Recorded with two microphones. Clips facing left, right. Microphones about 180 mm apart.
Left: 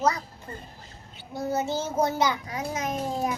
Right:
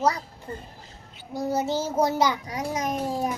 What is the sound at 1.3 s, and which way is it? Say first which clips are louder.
A child's voice: right 2 dB; 35° right (ahead or behind).